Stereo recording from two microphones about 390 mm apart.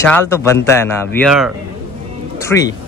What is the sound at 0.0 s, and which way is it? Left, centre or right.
Speech, centre.